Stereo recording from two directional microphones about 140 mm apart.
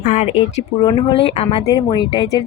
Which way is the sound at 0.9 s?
45° left (ahead or behind).